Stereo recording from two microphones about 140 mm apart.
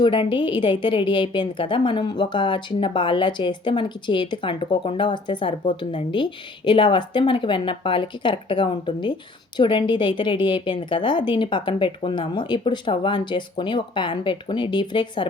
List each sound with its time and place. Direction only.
0.0 s a woman's voice: 35° left (ahead or behind)